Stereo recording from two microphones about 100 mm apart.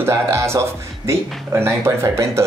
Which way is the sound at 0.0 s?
25° right (ahead or behind).